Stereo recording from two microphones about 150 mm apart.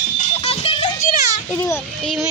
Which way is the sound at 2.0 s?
Centre (ahead or behind).